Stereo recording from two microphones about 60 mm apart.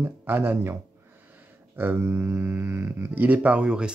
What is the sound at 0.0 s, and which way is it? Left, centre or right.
Speech, right.